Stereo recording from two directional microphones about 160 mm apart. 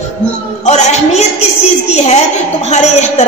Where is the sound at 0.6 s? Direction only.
45° left (ahead or behind).